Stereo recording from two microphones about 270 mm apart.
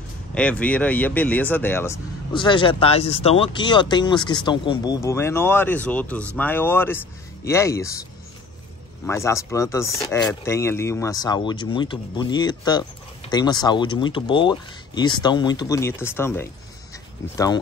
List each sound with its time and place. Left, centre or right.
0.3 s speech: centre
9.0 s speech: centre